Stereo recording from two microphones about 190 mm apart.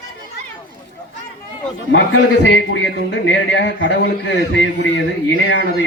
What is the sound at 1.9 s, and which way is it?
A man's voice, 80° left.